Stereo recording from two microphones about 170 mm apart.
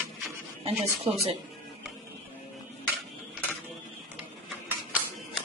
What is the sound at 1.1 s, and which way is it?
Speech, 30° right (ahead or behind).